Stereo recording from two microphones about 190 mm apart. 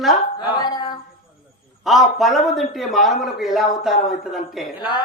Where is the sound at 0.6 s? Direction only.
20° left (ahead or behind).